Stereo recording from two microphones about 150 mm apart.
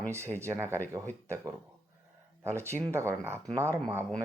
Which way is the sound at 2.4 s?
15° right (ahead or behind).